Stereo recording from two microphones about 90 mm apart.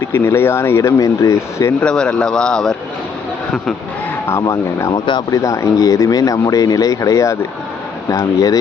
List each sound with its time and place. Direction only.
0.0 s speech: 30° left (ahead or behind)
1.8 s a man's voice: 10° left (ahead or behind)
4.3 s speech: 35° left (ahead or behind); by 5.2 s 55° left (ahead or behind)
5.3 s speech: 40° left (ahead or behind)